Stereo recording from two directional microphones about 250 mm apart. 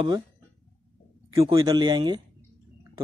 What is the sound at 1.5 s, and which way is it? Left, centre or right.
Speech, centre.